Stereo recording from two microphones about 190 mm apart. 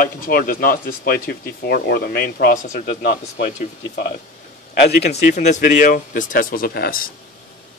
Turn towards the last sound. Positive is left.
turn(degrees=55)  # may be behind; listen again after turning